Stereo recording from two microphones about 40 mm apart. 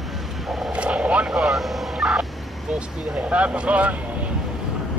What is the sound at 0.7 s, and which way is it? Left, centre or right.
Vehicle, right.